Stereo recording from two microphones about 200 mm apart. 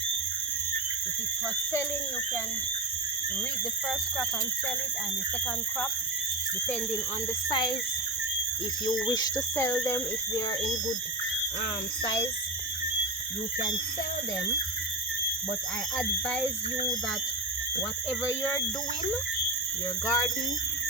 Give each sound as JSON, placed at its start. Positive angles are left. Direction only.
{"t": 7.5, "sound": "speech", "side_deg": 25}
{"t": 9.0, "sound": "speech", "side_deg": 20}
{"t": 20.1, "sound": "speech", "side_deg": 20}